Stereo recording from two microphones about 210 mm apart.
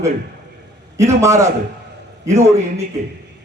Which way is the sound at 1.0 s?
15° right (ahead or behind).